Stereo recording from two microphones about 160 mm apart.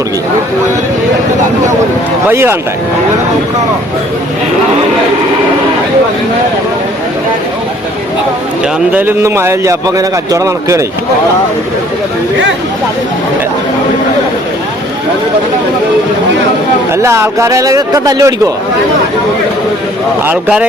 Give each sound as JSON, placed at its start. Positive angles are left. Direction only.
{"t": 2.3, "sound": "speech", "side_deg": -15}
{"t": 8.9, "sound": "speech", "side_deg": -10}
{"t": 16.9, "sound": "speech", "side_deg": -15}
{"t": 20.2, "sound": "speech", "side_deg": -10}